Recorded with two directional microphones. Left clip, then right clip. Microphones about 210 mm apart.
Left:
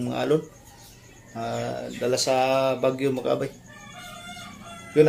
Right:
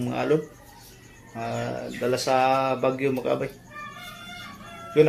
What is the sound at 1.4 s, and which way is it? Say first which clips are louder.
Speech: left 1 dB; 5° left (ahead or behind).